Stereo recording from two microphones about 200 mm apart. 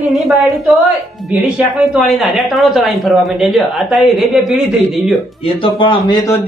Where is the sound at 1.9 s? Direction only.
Centre (ahead or behind).